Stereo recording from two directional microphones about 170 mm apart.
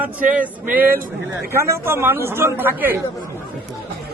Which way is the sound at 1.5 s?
15° right (ahead or behind).